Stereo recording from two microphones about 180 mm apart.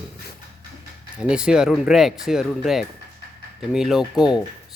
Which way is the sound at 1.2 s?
5° right (ahead or behind).